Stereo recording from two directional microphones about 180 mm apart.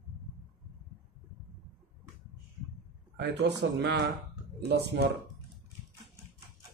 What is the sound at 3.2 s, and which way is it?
Speech, 70° right (ahead or behind).